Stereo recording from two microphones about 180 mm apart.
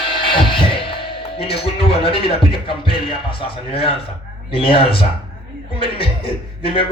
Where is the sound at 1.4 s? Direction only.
30° left (ahead or behind).